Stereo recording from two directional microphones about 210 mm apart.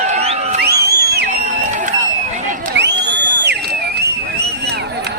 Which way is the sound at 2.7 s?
55° right (ahead or behind).